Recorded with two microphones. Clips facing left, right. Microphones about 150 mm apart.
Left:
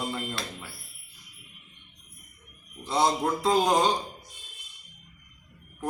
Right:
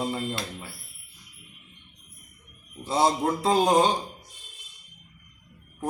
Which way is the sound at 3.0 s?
30° right (ahead or behind).